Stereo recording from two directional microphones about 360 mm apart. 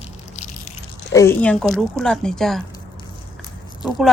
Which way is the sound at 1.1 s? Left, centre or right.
Centre.